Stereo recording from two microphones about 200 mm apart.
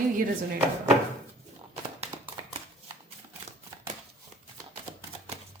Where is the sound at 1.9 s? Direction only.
30° right (ahead or behind).